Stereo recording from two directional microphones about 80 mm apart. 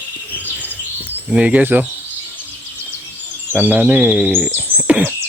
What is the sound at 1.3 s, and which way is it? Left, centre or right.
Insect, centre.